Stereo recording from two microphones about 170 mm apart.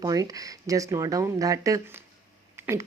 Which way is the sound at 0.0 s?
20° right (ahead or behind).